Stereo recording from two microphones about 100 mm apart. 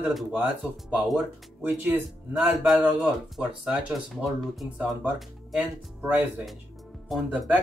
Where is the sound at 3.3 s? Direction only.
10° right (ahead or behind).